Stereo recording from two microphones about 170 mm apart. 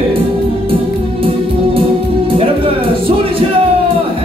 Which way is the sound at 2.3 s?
30° right (ahead or behind).